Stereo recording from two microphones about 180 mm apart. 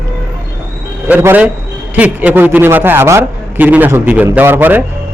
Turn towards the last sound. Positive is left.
turn(degrees=-10)  # may be behind; listen again after turning